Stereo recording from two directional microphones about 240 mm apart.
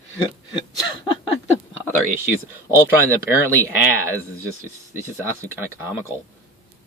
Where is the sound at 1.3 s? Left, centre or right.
Left.